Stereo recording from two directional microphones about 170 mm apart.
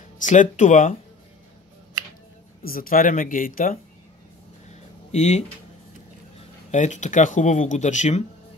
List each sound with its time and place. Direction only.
0.2 s speech: 45° left (ahead or behind)
2.6 s speech: 55° left (ahead or behind)
5.1 s speech: 45° left (ahead or behind)
6.7 s speech: 45° left (ahead or behind)